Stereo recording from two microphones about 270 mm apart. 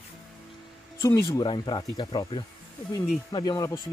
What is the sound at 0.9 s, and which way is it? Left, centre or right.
Speech, centre.